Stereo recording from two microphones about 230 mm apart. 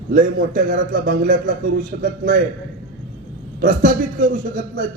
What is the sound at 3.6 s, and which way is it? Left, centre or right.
A man's voice, right.